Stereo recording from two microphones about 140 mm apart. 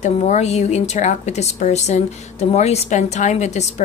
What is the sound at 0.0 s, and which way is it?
A woman's voice, 55° left (ahead or behind).